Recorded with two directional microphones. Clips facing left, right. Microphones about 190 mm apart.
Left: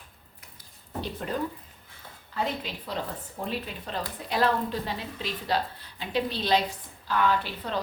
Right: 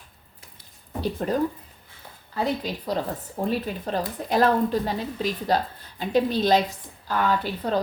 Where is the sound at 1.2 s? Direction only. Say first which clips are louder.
Right 7 dB; 40° right (ahead or behind).